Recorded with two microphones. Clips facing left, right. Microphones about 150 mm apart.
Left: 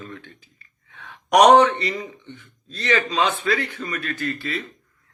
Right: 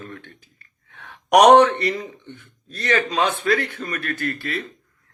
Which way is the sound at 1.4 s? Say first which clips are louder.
Right 1 dB; 55° right (ahead or behind).